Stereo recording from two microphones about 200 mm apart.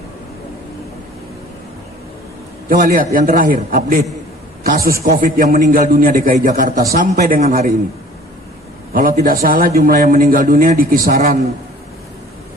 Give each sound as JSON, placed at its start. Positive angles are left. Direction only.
{"t": 2.6, "sound": "a man's voice", "side_deg": -45}
{"t": 8.9, "sound": "a man's voice", "side_deg": -45}